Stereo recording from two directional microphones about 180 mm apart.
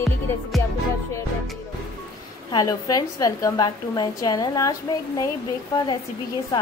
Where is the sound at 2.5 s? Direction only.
20° left (ahead or behind).